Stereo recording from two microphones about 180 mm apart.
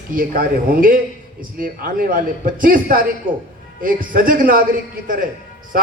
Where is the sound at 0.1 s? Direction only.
50° right (ahead or behind).